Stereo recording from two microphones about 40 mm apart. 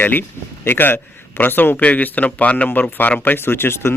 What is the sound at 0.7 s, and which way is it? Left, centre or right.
A man's voice, left.